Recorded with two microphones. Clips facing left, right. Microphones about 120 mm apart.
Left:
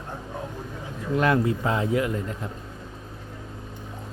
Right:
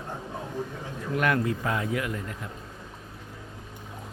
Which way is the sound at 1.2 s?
25° left (ahead or behind).